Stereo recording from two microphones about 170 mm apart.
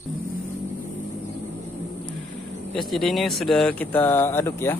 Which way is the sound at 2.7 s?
Centre (ahead or behind).